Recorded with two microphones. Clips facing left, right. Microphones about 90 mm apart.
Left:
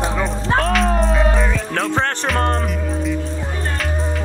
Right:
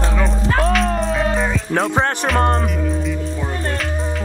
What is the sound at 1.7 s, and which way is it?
Music, 15° right (ahead or behind).